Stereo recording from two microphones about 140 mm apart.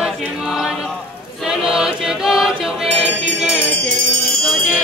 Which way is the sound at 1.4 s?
5° right (ahead or behind).